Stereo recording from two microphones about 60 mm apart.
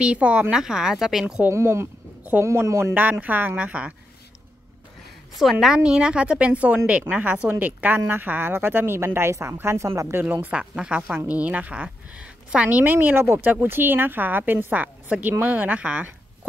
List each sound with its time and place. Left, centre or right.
0.0 s a woman's voice: centre
1.5 s a woman's voice: right
2.9 s a woman's voice: right
3.5 s a woman's voice: right
5.3 s a woman's voice: centre
5.8 s a woman's voice: centre; by 10.2 s right
10.2 s a woman's voice: right
10.5 s a woman's voice: centre